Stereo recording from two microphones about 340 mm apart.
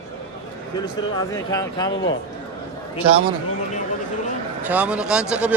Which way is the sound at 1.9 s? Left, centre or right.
Left.